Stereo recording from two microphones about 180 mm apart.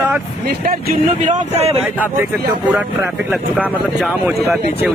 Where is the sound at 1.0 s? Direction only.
45° right (ahead or behind).